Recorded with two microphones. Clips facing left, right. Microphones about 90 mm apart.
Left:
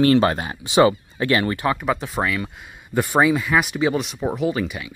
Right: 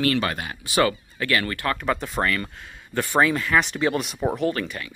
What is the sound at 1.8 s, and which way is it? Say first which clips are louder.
Speech: left 2 dB; 5° left (ahead or behind).